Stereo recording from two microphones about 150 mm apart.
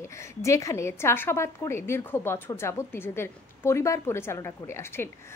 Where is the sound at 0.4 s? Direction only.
20° left (ahead or behind).